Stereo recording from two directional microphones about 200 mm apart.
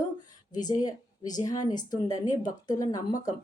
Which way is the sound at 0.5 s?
20° left (ahead or behind).